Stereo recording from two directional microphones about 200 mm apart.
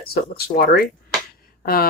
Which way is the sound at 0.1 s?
50° left (ahead or behind).